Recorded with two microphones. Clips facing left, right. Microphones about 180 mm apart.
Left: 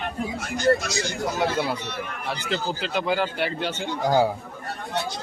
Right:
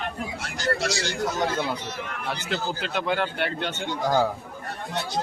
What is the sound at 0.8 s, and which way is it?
Speech, 85° right.